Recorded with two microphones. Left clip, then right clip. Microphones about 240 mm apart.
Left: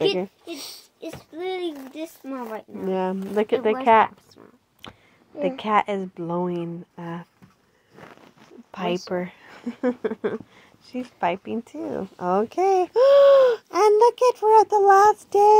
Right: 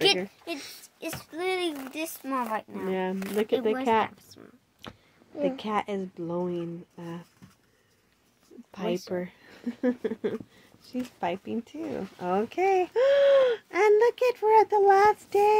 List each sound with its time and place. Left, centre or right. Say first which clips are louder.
1.3 s a sound: even; right
2.2 s speech: right 5 dB; right
2.9 s speech: left 5 dB; left
3.3 s speech: left 5 dB; centre
8.7 s speech: left 5 dB; centre
11.6 s speech: left 5 dB; centre